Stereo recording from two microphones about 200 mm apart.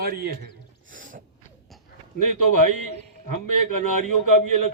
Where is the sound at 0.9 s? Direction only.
40° right (ahead or behind).